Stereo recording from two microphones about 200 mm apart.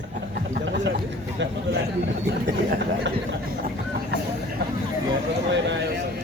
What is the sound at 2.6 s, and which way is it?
Speech, 55° right (ahead or behind).